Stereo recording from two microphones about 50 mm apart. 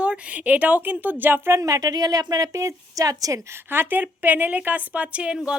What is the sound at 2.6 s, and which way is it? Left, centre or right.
Speech, right.